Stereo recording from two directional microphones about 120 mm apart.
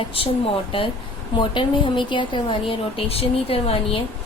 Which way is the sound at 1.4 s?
45° left (ahead or behind).